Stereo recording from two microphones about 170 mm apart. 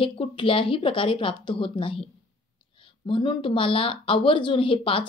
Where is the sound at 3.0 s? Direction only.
30° left (ahead or behind).